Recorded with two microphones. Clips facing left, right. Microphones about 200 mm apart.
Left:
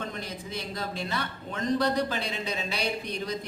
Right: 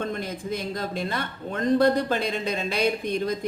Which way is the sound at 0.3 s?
50° right (ahead or behind).